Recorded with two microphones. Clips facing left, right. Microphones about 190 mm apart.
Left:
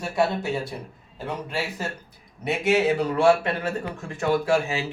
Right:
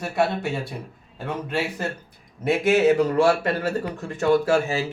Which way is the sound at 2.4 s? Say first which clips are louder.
Right 3 dB; 50° right (ahead or behind).